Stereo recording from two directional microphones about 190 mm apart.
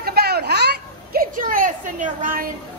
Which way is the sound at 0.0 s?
55° right (ahead or behind).